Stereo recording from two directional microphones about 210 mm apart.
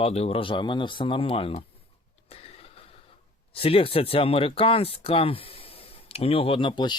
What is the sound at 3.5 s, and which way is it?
Speech, 25° left (ahead or behind).